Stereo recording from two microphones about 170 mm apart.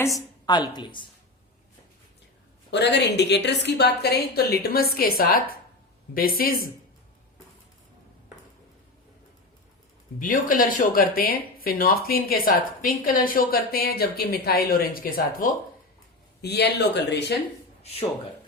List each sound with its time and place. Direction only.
0.0 s a woman's voice: 20° left (ahead or behind)
2.6 s a woman's voice: 90° left; by 6.7 s 60° left (ahead or behind)
10.2 s speech: 50° left (ahead or behind)
16.4 s speech: 75° left (ahead or behind)